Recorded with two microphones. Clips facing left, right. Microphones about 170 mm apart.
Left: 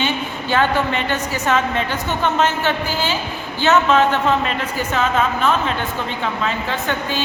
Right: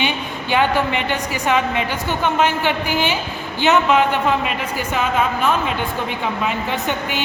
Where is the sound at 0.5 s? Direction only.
15° right (ahead or behind).